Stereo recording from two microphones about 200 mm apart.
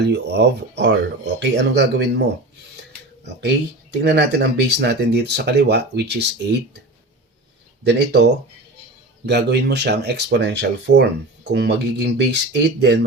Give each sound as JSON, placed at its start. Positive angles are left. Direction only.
{"t": 0.0, "sound": "speech", "side_deg": -55}
{"t": 3.9, "sound": "speech", "side_deg": -60}
{"t": 7.9, "sound": "speech", "side_deg": -60}